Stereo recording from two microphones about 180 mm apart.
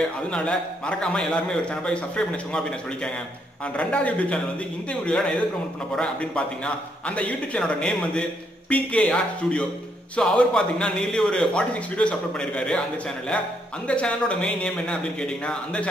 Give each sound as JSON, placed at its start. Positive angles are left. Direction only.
{"t": 0.3, "sound": "a man's voice", "side_deg": 5}